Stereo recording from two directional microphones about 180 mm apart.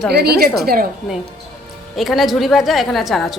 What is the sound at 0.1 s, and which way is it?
Speech, 60° right (ahead or behind).